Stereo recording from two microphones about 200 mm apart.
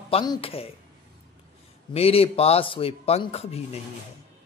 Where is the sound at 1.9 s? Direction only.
30° left (ahead or behind).